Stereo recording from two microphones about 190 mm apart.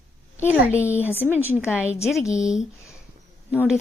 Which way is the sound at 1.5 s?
5° right (ahead or behind).